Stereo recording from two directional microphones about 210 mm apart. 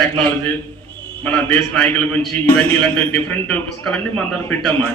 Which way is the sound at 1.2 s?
5° left (ahead or behind).